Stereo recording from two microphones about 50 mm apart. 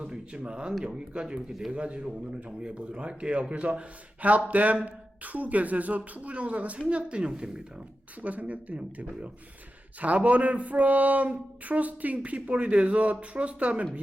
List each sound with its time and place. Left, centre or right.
0.0 s speech: right
8.2 s speech: right